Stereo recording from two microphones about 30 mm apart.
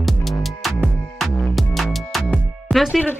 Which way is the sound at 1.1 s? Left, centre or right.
Centre.